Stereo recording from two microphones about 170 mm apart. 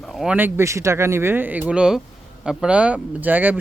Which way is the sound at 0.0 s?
Centre (ahead or behind).